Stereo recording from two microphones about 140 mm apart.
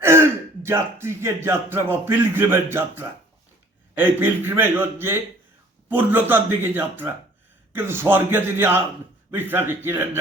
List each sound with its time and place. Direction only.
0.0 s a man's voice: 15° right (ahead or behind)